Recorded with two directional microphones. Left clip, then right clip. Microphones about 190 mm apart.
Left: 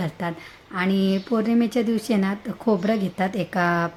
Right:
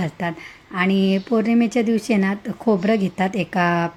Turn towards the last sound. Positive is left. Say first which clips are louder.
# right 2 dB
turn(degrees=-10)  # may be behind; listen again after turning